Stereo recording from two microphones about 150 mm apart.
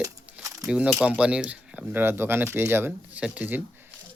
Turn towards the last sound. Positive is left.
turn(degrees=-10)  # may be behind; listen again after turning